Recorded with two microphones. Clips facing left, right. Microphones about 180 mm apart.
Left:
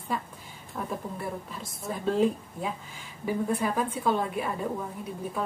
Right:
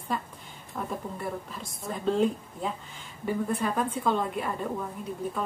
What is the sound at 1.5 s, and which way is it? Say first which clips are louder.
A woman's voice: left 1 dB; 5° left (ahead or behind).